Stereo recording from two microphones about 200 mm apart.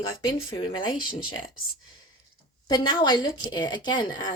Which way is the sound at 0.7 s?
25° left (ahead or behind).